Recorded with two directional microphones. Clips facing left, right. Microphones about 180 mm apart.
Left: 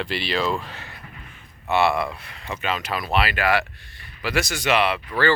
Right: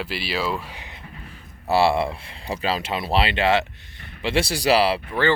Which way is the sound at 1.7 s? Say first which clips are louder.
Right 2 dB; 30° right (ahead or behind).